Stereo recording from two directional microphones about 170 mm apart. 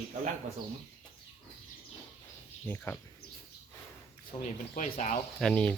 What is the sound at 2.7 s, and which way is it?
Speech, 10° left (ahead or behind).